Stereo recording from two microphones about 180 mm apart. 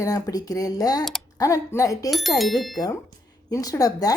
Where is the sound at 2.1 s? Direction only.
Centre (ahead or behind).